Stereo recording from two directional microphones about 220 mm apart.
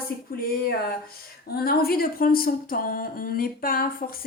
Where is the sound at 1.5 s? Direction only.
45° left (ahead or behind).